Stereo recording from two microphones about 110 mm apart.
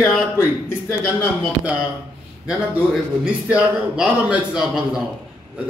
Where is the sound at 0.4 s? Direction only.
25° left (ahead or behind).